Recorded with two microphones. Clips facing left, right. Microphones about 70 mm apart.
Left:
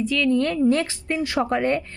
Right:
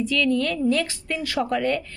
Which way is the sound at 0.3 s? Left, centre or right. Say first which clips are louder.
Left 6 dB; left.